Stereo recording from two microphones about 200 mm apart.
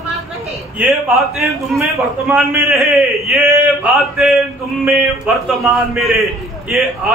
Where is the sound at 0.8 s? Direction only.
Centre (ahead or behind).